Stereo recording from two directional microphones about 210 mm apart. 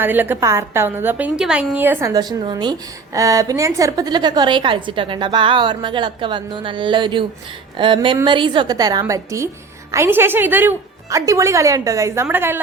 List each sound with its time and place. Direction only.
0.0 s a woman's voice: 10° right (ahead or behind)